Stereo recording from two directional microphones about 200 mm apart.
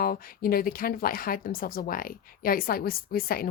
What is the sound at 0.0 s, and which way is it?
Speech, 45° left (ahead or behind).